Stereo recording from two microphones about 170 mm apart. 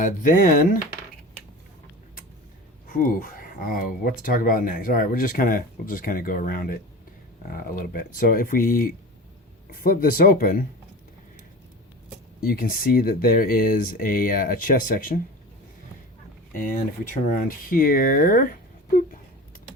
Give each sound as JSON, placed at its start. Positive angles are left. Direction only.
{"t": 0.0, "sound": "speech", "side_deg": 50}
{"t": 2.8, "sound": "speech", "side_deg": 55}
{"t": 12.4, "sound": "speech", "side_deg": 60}
{"t": 16.6, "sound": "speech", "side_deg": 55}